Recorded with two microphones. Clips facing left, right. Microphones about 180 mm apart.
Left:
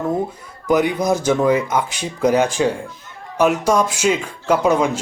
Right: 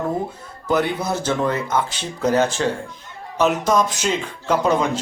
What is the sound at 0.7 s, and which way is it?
Speech, 15° left (ahead or behind).